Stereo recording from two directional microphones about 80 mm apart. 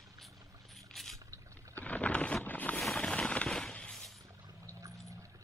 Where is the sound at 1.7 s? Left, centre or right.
Centre.